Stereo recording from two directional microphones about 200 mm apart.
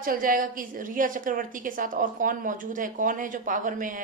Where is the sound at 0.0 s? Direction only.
45° right (ahead or behind).